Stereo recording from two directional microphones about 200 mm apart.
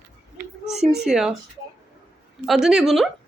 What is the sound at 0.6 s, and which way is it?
Speech, centre (ahead or behind).